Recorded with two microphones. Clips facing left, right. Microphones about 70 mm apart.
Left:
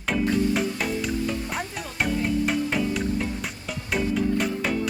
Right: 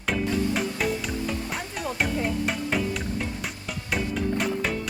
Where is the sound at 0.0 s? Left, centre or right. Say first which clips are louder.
Left 2 dB; centre.